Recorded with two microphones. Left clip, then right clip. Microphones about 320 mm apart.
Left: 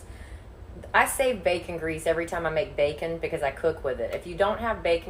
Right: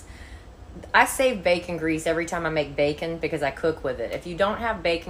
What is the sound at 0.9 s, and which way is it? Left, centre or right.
A woman's voice, right.